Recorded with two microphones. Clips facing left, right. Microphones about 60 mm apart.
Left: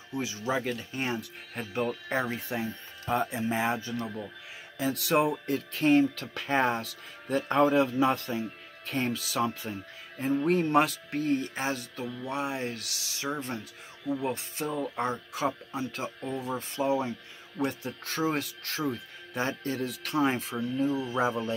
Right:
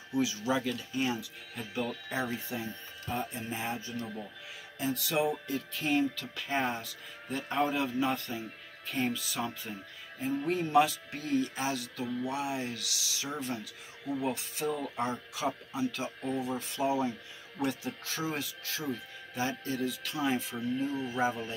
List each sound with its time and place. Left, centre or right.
0.2 s speech: left
3.1 s speech: left
10.2 s speech: left
14.7 s speech: left
15.0 s speech: left
17.8 s speech: left
20.5 s speech: left